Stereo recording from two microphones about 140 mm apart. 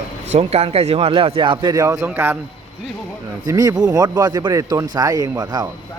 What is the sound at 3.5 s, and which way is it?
Speech, 25° right (ahead or behind).